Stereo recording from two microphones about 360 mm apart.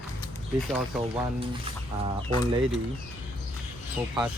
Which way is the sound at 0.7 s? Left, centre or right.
Centre.